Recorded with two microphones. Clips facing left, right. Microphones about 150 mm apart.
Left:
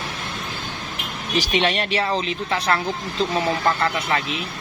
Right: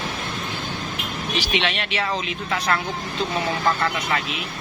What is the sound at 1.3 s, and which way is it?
Speech, 40° left (ahead or behind).